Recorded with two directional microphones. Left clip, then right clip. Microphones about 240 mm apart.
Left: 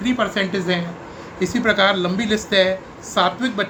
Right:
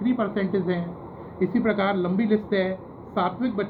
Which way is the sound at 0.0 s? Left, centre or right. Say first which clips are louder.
Left 5 dB; left.